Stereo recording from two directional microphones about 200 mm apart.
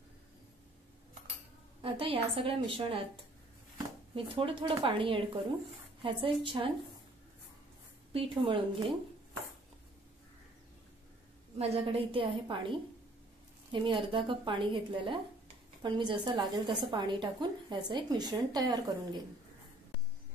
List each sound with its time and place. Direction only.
1.8 s a woman's voice: 25° right (ahead or behind)
8.1 s a woman's voice: 25° right (ahead or behind)
11.5 s a woman's voice: 30° right (ahead or behind)